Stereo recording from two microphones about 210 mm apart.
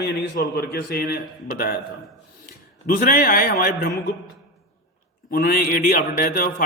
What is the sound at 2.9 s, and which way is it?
A man's voice, 45° left (ahead or behind).